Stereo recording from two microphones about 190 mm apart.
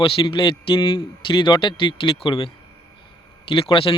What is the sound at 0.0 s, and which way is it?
Speech, 30° left (ahead or behind).